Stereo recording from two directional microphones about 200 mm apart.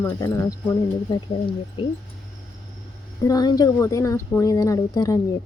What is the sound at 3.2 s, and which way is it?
Speech, 20° left (ahead or behind).